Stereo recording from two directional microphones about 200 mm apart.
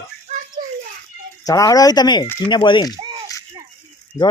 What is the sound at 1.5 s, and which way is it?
Speech, 20° left (ahead or behind).